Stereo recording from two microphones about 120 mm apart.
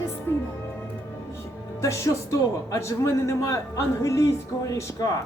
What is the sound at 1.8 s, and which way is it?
Speech, 25° left (ahead or behind).